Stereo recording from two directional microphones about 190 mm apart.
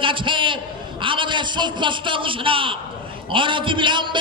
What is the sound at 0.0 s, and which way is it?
A man's voice, 25° right (ahead or behind).